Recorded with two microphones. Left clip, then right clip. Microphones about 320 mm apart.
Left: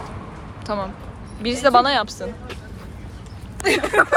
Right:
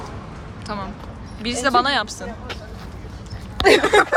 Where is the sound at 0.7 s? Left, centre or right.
Centre.